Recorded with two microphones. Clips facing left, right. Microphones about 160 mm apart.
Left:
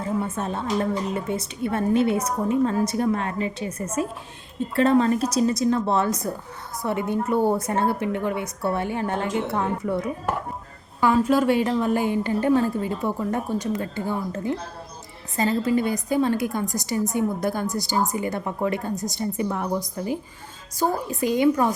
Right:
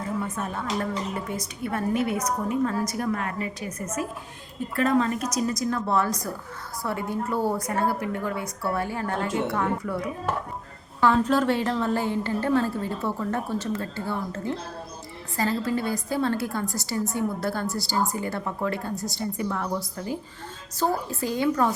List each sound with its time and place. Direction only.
0.3 s a woman's voice: 25° left (ahead or behind)
11.0 s a woman's voice: 10° left (ahead or behind)